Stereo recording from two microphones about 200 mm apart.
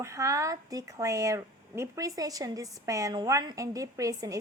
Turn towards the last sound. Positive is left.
turn(degrees=-15)  # may be behind; listen again after turning